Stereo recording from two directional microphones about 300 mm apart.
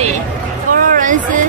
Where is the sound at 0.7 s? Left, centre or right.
Right.